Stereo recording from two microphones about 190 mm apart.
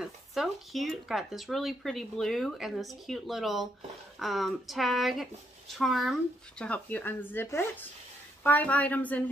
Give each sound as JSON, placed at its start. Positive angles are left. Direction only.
{"t": 0.0, "sound": "speech", "side_deg": 0}